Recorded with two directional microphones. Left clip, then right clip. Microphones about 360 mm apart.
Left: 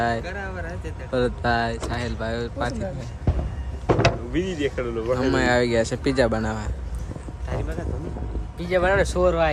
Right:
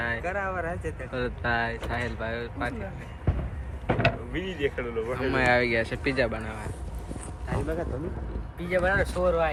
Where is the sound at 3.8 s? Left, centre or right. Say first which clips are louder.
Left 5 dB; left.